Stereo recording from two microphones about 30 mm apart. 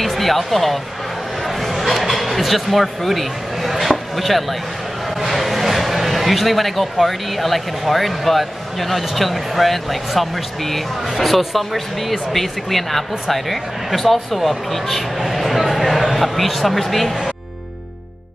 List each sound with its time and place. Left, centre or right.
0.0 s speech: centre
1.4 s a sound: centre
5.1 s speech: centre